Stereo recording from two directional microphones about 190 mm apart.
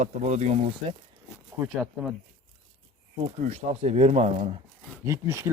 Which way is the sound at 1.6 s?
5° right (ahead or behind).